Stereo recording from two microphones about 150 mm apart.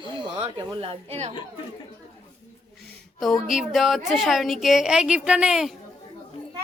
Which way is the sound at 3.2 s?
Centre (ahead or behind).